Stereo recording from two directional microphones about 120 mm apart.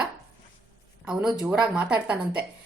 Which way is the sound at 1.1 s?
5° right (ahead or behind).